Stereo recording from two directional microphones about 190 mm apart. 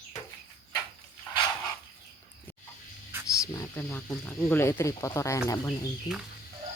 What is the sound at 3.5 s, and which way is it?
Speech, 10° left (ahead or behind).